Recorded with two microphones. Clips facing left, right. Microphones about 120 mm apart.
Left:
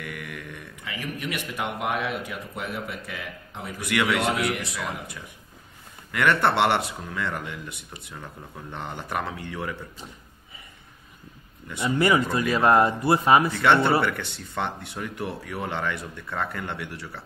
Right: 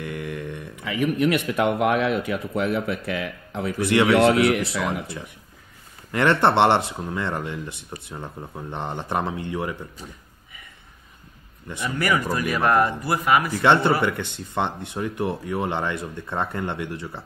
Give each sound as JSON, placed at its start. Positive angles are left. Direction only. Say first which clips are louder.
{"t": 0.0, "sound": "mantra", "louder": "right 6 dB", "side_deg": -25}
{"t": 0.8, "sound": "speech", "louder": "right 11 dB", "side_deg": -60}
{"t": 3.8, "sound": "speech", "louder": "right 6 dB", "side_deg": -25}
{"t": 4.2, "sound": "speech", "louder": "right 8 dB", "side_deg": -65}
{"t": 6.1, "sound": "speech", "louder": "right 3 dB", "side_deg": -25}
{"t": 11.8, "sound": "speech", "louder": "left 2 dB", "side_deg": 20}
{"t": 13.5, "sound": "speech", "louder": "right 2 dB", "side_deg": -25}